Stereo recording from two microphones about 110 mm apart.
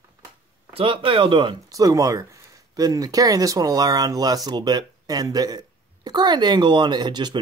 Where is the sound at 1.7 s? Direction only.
30° right (ahead or behind).